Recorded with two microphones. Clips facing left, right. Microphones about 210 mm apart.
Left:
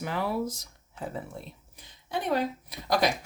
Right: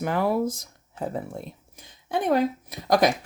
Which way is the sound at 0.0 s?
50° right (ahead or behind).